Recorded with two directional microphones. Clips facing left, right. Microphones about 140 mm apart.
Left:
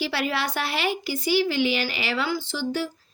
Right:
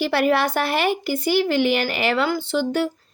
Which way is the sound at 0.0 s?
50° right (ahead or behind).